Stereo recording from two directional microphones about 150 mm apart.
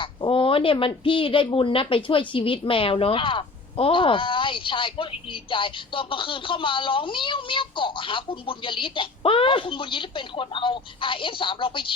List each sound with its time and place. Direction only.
0.0 s speech: 35° left (ahead or behind)